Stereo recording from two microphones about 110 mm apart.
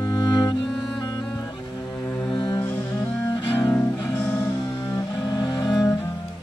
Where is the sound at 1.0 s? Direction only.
40° left (ahead or behind).